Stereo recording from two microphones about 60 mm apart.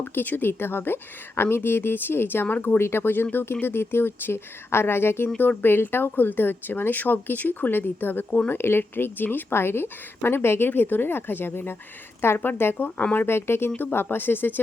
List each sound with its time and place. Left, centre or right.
0.1 s speech: left
13.2 s speech: left